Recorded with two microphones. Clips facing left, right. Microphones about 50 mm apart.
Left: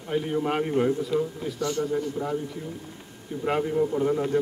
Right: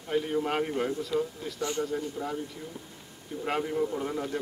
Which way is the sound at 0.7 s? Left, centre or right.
Centre.